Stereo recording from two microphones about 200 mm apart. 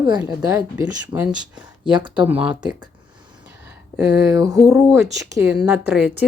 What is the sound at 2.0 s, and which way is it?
Speech, 25° right (ahead or behind).